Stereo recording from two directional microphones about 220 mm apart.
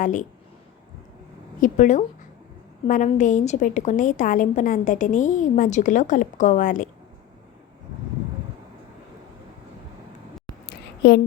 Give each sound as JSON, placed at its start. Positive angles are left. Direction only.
{"t": 0.0, "sound": "a woman's voice", "side_deg": 35}
{"t": 1.6, "sound": "a woman's voice", "side_deg": 35}
{"t": 10.7, "sound": "a sound", "side_deg": 45}